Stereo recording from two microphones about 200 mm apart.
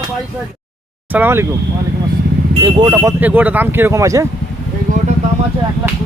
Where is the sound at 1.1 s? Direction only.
10° right (ahead or behind).